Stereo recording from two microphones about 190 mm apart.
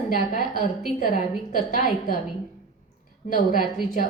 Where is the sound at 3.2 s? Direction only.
45° left (ahead or behind).